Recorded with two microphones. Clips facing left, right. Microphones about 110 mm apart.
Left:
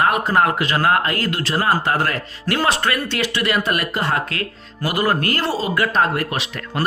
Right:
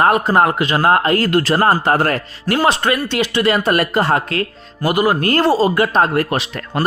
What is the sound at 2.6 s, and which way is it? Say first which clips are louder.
Speech: right 4 dB; 20° right (ahead or behind).